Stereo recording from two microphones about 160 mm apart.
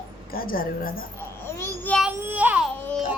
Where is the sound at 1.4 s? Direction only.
15° left (ahead or behind).